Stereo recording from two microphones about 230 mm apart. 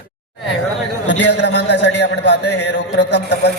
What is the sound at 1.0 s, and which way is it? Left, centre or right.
A man's voice, left.